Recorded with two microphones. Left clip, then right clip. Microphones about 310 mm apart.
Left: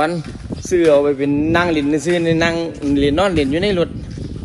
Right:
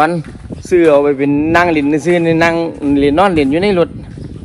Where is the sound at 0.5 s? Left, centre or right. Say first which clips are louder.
Right 5 dB; centre.